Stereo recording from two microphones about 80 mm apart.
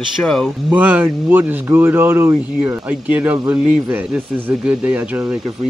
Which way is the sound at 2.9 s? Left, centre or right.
Centre.